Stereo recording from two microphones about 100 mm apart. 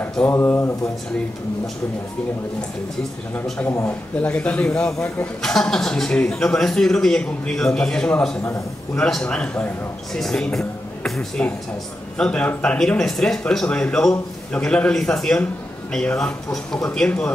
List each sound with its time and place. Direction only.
0.1 s speech: 10° left (ahead or behind)
0.4 s speech: 25° left (ahead or behind)
3.6 s a man's voice: 25° left (ahead or behind); by 17.3 s 5° left (ahead or behind)